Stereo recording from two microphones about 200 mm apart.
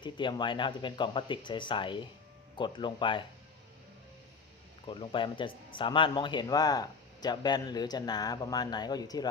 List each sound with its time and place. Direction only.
0.0 s speech: 25° left (ahead or behind)
4.9 s speech: 25° left (ahead or behind)